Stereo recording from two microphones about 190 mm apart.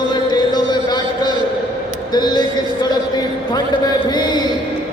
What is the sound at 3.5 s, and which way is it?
Speech, 20° left (ahead or behind).